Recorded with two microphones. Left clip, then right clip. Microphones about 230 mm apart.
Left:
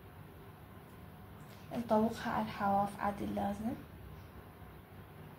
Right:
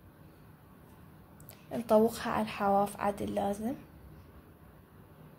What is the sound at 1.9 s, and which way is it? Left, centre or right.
A woman's voice, right.